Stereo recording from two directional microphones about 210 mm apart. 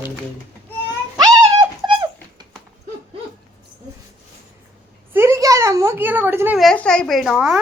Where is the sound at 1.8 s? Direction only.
20° right (ahead or behind).